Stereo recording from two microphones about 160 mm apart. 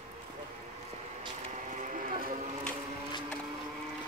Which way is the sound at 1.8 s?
50° right (ahead or behind).